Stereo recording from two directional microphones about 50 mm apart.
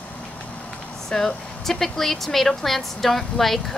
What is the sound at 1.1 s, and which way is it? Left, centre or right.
Speech, centre.